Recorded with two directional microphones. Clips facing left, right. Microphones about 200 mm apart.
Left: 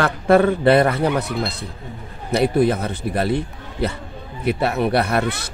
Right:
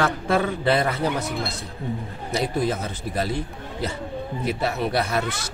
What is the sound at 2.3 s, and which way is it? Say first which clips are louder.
Speech: left 7 dB; 60° left (ahead or behind).